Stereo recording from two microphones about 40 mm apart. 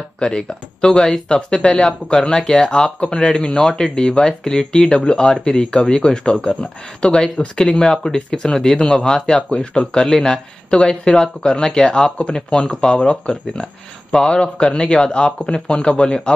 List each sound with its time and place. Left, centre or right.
0.2 s speech: left